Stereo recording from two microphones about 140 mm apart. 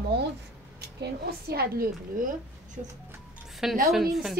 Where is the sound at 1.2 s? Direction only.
90° right.